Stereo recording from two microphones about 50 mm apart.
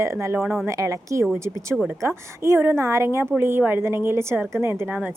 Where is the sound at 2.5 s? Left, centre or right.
Right.